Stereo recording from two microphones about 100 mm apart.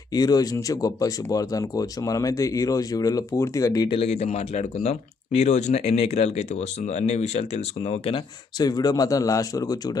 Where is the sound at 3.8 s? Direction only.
80° left.